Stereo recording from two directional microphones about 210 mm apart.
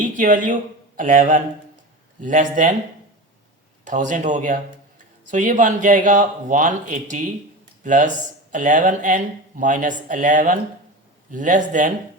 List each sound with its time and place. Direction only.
0.0 s speech: 40° right (ahead or behind)
3.8 s speech: 35° right (ahead or behind)